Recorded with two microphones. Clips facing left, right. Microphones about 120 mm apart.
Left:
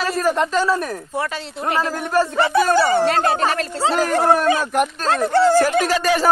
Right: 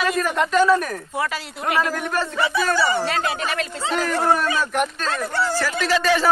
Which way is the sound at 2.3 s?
50° left (ahead or behind).